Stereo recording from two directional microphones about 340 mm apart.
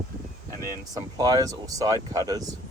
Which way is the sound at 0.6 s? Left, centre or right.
Centre.